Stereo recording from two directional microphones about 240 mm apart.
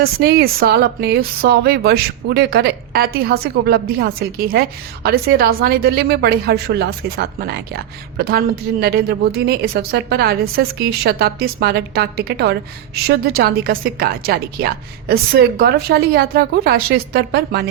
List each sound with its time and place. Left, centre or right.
0.0 s speech: right